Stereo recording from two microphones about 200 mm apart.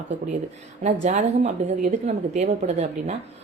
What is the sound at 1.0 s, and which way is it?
A woman's voice, 35° right (ahead or behind).